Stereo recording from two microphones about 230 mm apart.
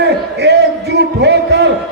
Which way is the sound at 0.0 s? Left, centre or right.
Right.